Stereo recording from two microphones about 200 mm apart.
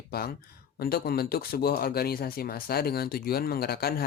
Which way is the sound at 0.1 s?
50° left (ahead or behind).